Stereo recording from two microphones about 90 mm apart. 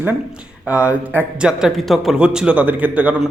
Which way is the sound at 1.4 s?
5° right (ahead or behind).